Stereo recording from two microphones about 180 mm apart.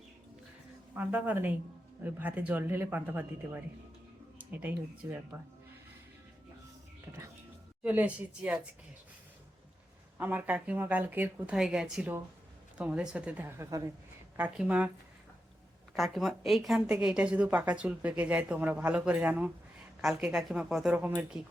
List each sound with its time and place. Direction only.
0.9 s a woman's voice: 10° right (ahead or behind)
4.4 s a sound: 10° right (ahead or behind)
5.0 s a woman's voice: 15° right (ahead or behind)
7.9 s a woman's voice: 10° right (ahead or behind)
10.2 s a woman's voice: 10° right (ahead or behind)
14.3 s a woman's voice: 5° right (ahead or behind)
16.0 s a woman's voice: centre (ahead or behind)